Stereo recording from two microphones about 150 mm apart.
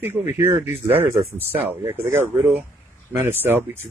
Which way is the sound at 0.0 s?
15° right (ahead or behind).